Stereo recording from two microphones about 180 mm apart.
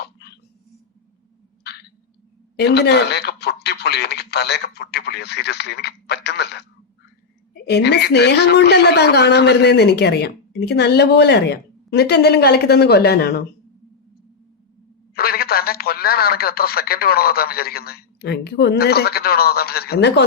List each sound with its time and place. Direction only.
2.6 s a woman's voice: 65° left (ahead or behind)
15.1 s speech: 55° left (ahead or behind)